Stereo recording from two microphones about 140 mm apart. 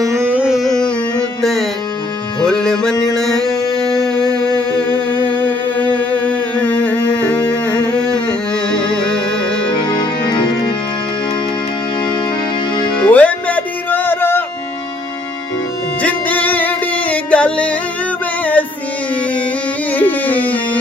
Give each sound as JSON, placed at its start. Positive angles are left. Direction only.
{"t": 0.0, "sound": "music", "side_deg": -20}
{"t": 9.8, "sound": "music", "side_deg": 30}
{"t": 13.0, "sound": "music", "side_deg": 10}
{"t": 16.0, "sound": "music", "side_deg": 10}
{"t": 19.9, "sound": "music", "side_deg": 10}